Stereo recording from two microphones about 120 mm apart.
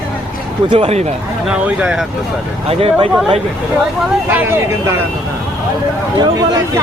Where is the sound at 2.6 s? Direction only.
55° right (ahead or behind).